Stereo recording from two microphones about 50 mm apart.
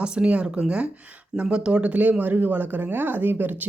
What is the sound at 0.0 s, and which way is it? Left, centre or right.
Speech, centre.